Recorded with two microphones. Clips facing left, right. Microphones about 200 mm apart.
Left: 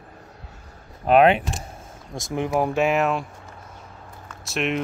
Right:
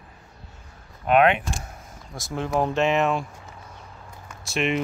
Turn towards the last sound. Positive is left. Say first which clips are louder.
# even
turn(degrees=0)  # may be behind; listen again after turning